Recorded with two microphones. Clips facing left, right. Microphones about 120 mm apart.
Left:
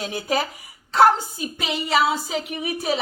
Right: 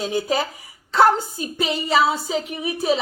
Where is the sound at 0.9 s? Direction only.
35° right (ahead or behind).